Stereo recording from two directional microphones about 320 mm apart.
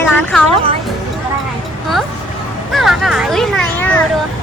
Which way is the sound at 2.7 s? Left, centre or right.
Centre.